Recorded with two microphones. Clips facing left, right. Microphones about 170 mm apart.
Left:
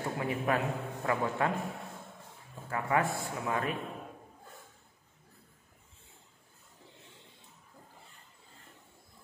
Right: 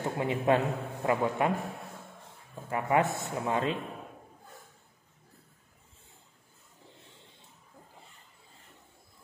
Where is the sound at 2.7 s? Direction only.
20° right (ahead or behind).